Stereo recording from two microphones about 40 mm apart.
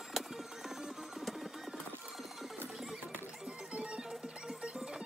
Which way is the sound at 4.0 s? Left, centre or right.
Centre.